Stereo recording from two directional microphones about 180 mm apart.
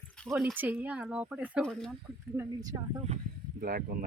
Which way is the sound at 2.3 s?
20° right (ahead or behind).